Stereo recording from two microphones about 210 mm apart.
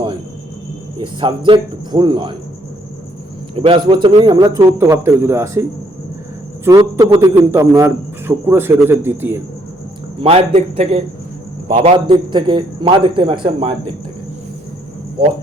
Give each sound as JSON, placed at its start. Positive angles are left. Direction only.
{"t": 0.9, "sound": "a man's voice", "side_deg": -25}
{"t": 3.5, "sound": "a man's voice", "side_deg": -25}
{"t": 6.7, "sound": "a man's voice", "side_deg": -15}
{"t": 10.2, "sound": "a man's voice", "side_deg": -30}